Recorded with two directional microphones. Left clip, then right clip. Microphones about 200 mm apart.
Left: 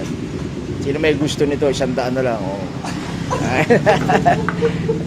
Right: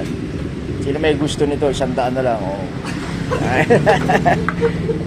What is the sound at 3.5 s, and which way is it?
Speech, 25° left (ahead or behind).